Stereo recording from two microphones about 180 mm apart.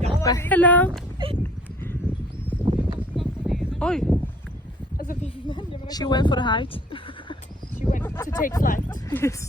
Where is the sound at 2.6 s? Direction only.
35° right (ahead or behind).